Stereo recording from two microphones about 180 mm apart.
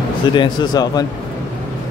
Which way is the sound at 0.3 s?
25° left (ahead or behind).